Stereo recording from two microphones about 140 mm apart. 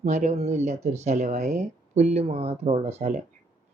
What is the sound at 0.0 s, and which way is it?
Speech, 60° right (ahead or behind).